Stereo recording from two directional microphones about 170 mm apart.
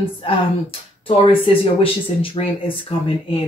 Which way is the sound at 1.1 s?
30° left (ahead or behind).